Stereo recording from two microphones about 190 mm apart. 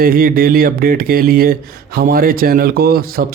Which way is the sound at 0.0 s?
50° right (ahead or behind).